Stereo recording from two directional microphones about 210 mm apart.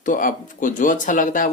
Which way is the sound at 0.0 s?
40° left (ahead or behind).